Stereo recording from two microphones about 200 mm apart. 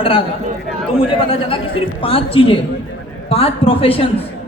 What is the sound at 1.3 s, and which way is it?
A man's voice, 30° left (ahead or behind).